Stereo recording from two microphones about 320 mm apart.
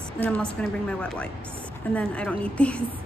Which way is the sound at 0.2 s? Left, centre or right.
Centre.